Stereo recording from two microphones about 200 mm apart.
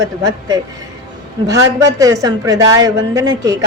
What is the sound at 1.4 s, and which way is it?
A woman's voice, 15° right (ahead or behind).